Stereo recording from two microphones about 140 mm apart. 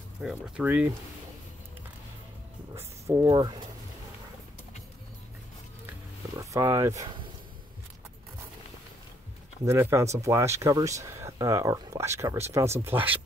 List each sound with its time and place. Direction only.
0.2 s speech: 5° right (ahead or behind)
2.7 s speech: 20° right (ahead or behind)
6.3 s speech: 20° right (ahead or behind)
9.7 s speech: 20° right (ahead or behind)